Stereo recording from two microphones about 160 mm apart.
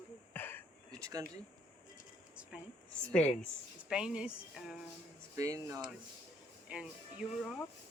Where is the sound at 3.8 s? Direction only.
5° right (ahead or behind).